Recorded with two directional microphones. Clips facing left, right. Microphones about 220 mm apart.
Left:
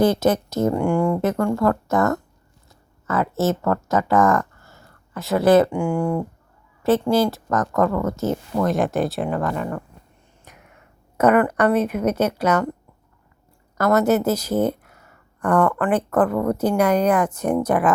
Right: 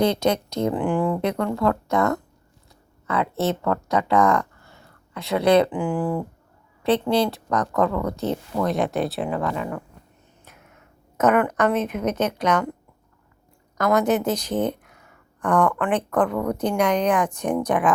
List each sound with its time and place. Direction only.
0.0 s speech: 5° left (ahead or behind)
11.2 s a woman's voice: 10° left (ahead or behind)
13.7 s a woman's voice: 5° left (ahead or behind)